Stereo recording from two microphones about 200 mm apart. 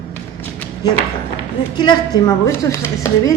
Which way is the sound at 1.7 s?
20° left (ahead or behind).